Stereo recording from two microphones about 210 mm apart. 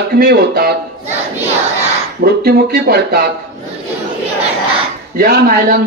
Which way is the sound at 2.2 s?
50° right (ahead or behind).